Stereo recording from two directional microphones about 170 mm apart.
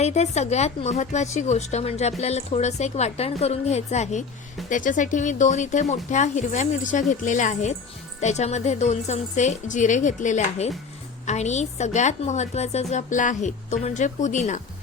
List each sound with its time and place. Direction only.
0.0 s a woman's voice: 40° left (ahead or behind)